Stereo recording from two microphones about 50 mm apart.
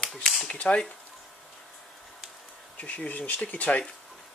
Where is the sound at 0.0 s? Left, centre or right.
Centre.